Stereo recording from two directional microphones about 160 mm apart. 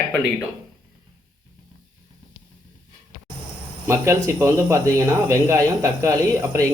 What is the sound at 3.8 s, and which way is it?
Speech, 15° right (ahead or behind).